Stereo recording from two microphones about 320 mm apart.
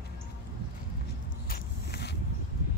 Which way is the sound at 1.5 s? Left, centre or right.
Left.